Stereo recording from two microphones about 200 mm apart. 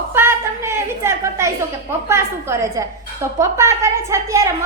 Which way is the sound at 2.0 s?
15° right (ahead or behind).